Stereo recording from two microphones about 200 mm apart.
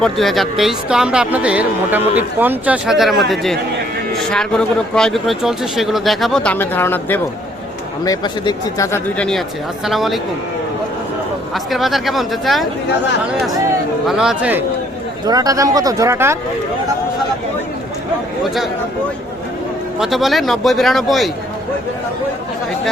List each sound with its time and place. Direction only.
0.0 s speech: centre (ahead or behind)
11.5 s speech: centre (ahead or behind)
14.1 s speech: 5° right (ahead or behind)
15.3 s speech: 20° right (ahead or behind)
20.0 s speech: centre (ahead or behind)